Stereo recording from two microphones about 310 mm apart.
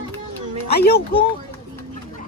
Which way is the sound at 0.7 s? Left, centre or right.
Left.